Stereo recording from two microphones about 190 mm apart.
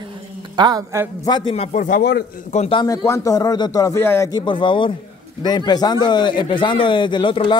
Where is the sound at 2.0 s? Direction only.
60° left (ahead or behind).